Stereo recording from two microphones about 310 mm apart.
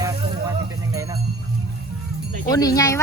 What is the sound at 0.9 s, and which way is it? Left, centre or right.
Music, centre.